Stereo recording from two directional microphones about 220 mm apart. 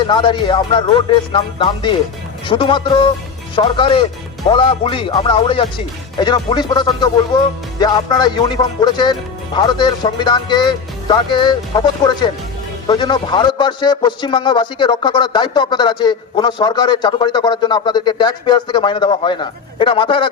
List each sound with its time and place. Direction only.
0.0 s a man's voice: 20° left (ahead or behind)